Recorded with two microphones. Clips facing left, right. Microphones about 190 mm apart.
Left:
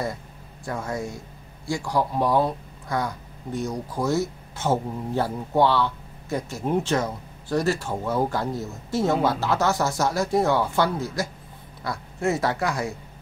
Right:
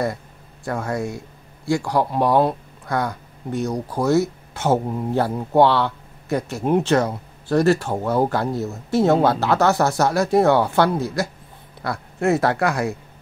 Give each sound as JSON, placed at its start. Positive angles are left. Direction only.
{"t": 0.7, "sound": "a man's voice", "side_deg": -65}